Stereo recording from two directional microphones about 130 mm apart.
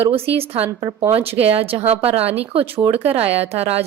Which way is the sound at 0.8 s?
30° right (ahead or behind).